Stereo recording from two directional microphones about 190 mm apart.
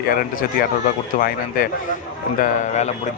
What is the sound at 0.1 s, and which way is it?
Speech, 50° left (ahead or behind).